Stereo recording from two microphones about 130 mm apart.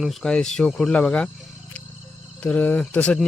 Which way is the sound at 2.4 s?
10° left (ahead or behind).